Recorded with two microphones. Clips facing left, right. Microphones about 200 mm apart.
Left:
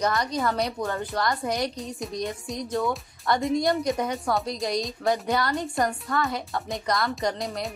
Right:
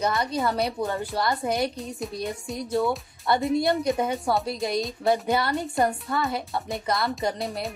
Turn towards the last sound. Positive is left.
turn(degrees=0)  # may be behind; listen again after turning